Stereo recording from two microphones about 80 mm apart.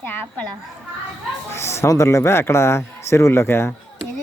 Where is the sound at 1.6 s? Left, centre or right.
Left.